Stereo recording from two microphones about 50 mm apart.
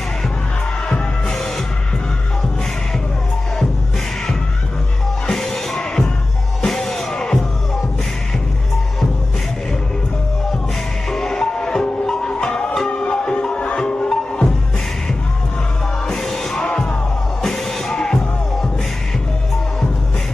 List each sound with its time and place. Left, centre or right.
5.2 s music: centre
11.1 s music: centre
16.1 s music: centre
16.6 s music: centre
17.4 s music: centre